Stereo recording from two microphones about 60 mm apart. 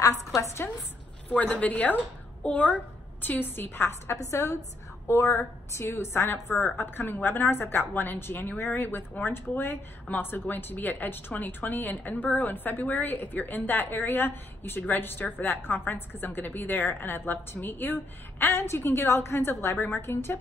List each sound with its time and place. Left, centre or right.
0.0 s a woman's voice: left
1.3 s a woman's voice: left
4.3 s a woman's voice: left
6.8 s a woman's voice: left